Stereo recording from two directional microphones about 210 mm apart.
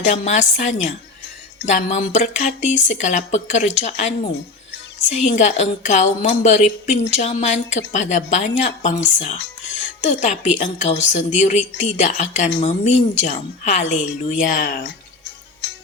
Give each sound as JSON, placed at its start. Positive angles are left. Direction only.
{"t": 0.0, "sound": "a woman's voice", "side_deg": 35}
{"t": 9.4, "sound": "music", "side_deg": 60}
{"t": 10.0, "sound": "a woman's voice", "side_deg": 35}